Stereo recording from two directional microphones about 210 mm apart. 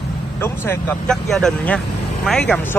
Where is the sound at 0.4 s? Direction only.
10° left (ahead or behind).